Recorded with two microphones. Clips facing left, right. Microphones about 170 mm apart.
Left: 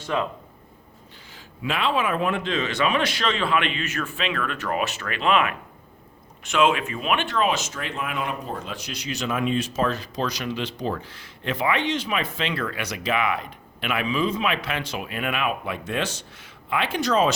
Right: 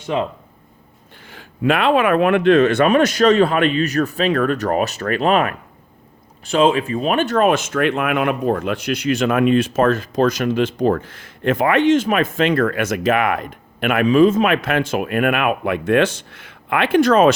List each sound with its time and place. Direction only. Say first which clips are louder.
0.0 s speech: right 5 dB; 20° right (ahead or behind)
1.3 s speech: right 11 dB; 55° right (ahead or behind)